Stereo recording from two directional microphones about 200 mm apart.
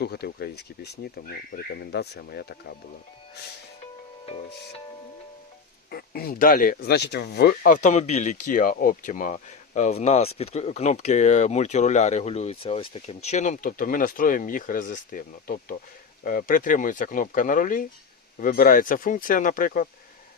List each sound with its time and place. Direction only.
0.0 s speech: 55° left (ahead or behind)
5.9 s speech: 50° left (ahead or behind)